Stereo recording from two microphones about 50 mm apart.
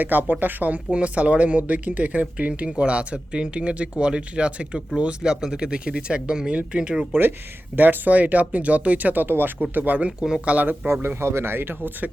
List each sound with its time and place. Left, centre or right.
0.0 s speech: right
0.9 s speech: right
7.1 s speech: right
10.2 s speech: centre
10.4 s speech: right
11.0 s speech: right